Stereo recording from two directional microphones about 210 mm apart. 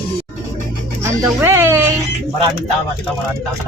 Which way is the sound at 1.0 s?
10° right (ahead or behind).